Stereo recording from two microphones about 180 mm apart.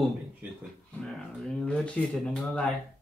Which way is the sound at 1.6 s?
5° left (ahead or behind).